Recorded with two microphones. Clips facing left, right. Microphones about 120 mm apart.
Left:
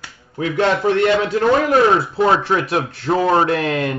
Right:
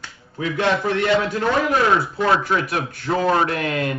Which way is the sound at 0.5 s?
30° left (ahead or behind).